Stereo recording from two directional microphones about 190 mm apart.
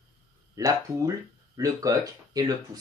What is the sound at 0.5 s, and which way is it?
Speech, 15° right (ahead or behind).